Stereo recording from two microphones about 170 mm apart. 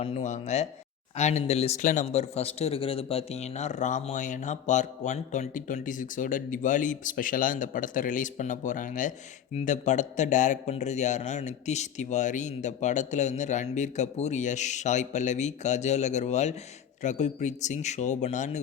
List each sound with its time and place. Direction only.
0.0 s speech: 40° left (ahead or behind)